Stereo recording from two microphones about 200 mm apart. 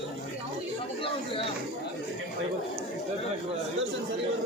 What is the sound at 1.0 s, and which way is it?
Chatter, 25° left (ahead or behind).